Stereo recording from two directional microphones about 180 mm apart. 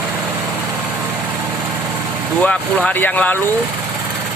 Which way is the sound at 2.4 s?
5° left (ahead or behind).